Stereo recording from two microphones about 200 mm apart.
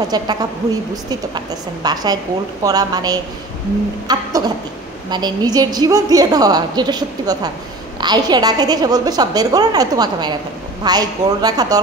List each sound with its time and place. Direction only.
0.1 s a woman's voice: 20° right (ahead or behind)